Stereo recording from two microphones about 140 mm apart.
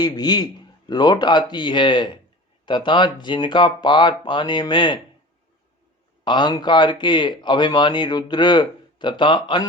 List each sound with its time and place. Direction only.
0.0 s a man's voice: 30° left (ahead or behind)
6.2 s speech: 30° left (ahead or behind)